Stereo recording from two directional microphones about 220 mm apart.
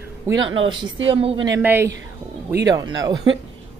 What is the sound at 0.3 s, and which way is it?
Speech, 60° right (ahead or behind).